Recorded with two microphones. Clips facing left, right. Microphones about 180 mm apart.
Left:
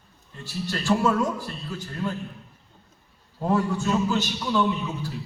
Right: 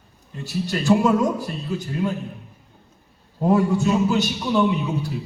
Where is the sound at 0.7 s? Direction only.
15° right (ahead or behind).